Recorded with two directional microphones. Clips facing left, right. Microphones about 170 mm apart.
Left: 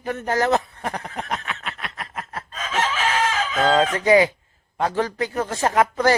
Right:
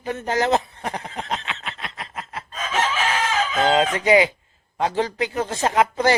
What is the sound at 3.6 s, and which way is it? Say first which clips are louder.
Speech: left 1 dB; 20° right (ahead or behind).